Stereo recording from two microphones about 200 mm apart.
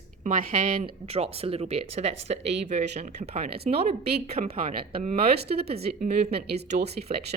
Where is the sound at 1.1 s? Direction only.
30° right (ahead or behind).